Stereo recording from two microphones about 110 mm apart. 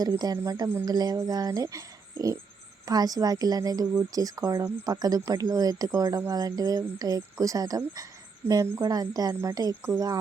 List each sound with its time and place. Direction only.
0.0 s a woman's voice: 35° right (ahead or behind)
8.4 s speech: 20° right (ahead or behind)
8.8 s a woman's voice: 35° right (ahead or behind)